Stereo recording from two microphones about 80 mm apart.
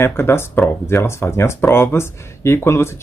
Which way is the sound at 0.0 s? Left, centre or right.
Left.